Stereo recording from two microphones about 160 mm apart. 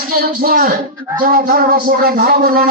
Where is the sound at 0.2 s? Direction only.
65° right (ahead or behind).